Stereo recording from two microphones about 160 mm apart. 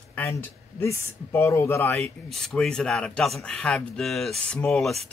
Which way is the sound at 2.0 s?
5° left (ahead or behind).